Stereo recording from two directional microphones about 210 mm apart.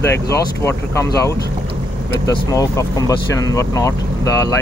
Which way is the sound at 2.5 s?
15° left (ahead or behind).